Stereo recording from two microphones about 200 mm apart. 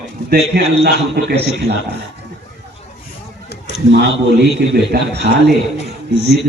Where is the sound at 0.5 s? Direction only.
55° right (ahead or behind).